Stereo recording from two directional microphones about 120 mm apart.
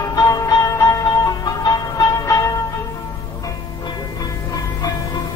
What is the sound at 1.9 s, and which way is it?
Music, 25° left (ahead or behind).